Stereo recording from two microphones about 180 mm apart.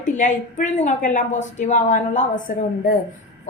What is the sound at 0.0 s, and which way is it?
A woman's voice, 45° left (ahead or behind).